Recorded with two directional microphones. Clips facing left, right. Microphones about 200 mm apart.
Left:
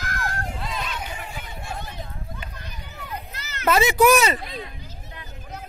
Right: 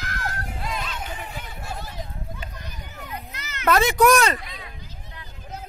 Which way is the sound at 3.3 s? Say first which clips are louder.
Even; 35° left (ahead or behind).